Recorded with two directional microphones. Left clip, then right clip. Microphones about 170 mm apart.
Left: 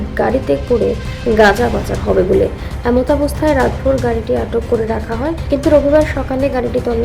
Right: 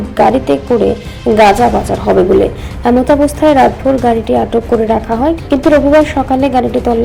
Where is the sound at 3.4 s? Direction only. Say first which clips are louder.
Right 6 dB; 15° right (ahead or behind).